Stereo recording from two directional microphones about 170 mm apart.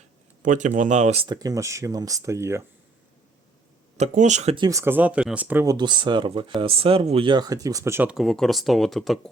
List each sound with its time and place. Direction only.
0.4 s speech: 45° right (ahead or behind)
1.3 s speech: 20° right (ahead or behind)
3.9 s speech: 45° right (ahead or behind)
4.5 s speech: 20° right (ahead or behind)
5.7 s speech: 25° right (ahead or behind)
8.1 s speech: centre (ahead or behind)